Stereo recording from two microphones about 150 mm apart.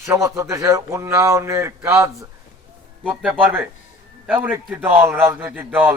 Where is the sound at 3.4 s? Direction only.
15° right (ahead or behind).